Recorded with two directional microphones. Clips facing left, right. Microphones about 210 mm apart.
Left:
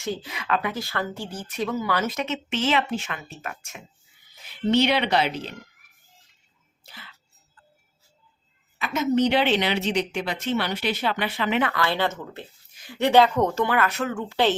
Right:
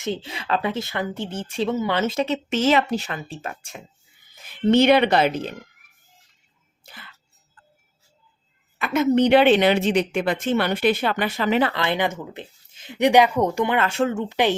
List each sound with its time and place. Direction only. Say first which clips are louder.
0.0 s speech: right 3 dB; 25° right (ahead or behind)
4.4 s a woman's voice: right 5 dB; 50° right (ahead or behind)
6.8 s speech: right 2 dB; 55° right (ahead or behind)
8.8 s a woman's voice: right 4 dB; 55° right (ahead or behind); by 11.7 s 40° right (ahead or behind)
11.7 s speech: right 1 dB; 20° right (ahead or behind)